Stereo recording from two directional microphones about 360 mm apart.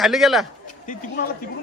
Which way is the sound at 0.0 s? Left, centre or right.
Centre.